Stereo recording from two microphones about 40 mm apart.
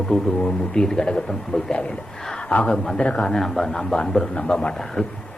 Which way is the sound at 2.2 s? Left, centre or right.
Centre.